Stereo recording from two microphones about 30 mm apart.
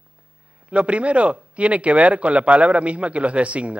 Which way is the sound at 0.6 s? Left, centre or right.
Right.